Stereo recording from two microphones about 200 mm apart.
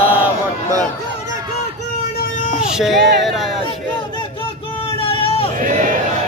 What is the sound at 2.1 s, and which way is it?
Vehicle, 40° left (ahead or behind).